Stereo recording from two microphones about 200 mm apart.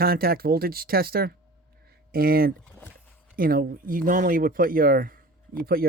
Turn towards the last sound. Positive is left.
turn(degrees=-50)  # may be behind; listen again after turning